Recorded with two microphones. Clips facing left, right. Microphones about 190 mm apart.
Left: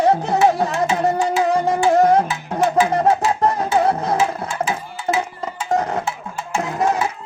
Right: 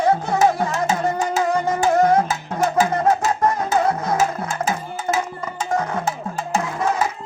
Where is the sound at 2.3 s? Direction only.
40° right (ahead or behind).